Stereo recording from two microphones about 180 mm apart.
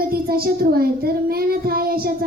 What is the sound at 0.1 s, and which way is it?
Speech, 55° right (ahead or behind).